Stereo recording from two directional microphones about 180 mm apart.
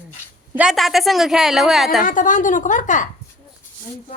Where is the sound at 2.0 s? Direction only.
45° left (ahead or behind).